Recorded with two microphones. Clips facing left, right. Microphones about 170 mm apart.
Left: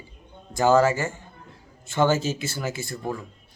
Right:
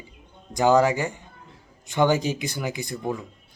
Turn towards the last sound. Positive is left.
turn(degrees=-15)  # may be behind; listen again after turning